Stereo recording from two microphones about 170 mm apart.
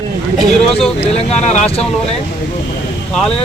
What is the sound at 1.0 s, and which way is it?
Speech, 40° left (ahead or behind).